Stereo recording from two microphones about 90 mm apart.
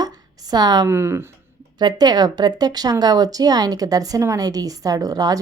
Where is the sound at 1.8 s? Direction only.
50° right (ahead or behind).